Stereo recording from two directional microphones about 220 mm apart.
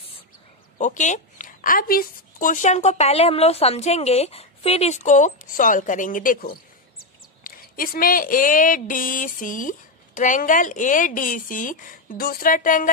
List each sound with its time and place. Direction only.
0.7 s a woman's voice: 35° left (ahead or behind)